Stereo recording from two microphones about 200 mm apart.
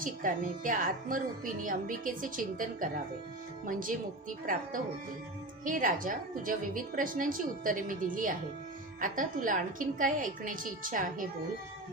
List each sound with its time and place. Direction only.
0.0 s speech: 40° right (ahead or behind)